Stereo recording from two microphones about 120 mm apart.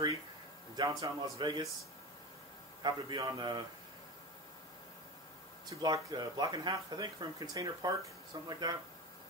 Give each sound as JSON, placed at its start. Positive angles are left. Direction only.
{"t": 0.7, "sound": "speech", "side_deg": -30}
{"t": 2.8, "sound": "speech", "side_deg": -35}
{"t": 5.7, "sound": "speech", "side_deg": -30}